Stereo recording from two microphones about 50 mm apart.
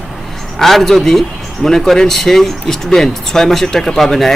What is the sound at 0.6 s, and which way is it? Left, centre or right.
Speech, centre.